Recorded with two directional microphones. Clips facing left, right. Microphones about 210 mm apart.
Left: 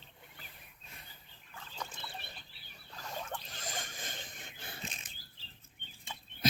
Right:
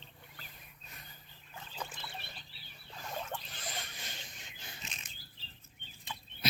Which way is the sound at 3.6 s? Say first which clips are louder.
Left 2 dB; 45° left (ahead or behind).